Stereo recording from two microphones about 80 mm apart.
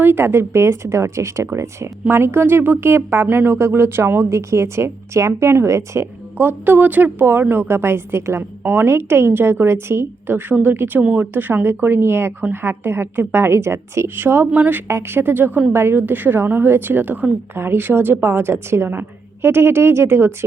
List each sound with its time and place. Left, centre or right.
0.0 s speech: right
6.3 s a woman's voice: right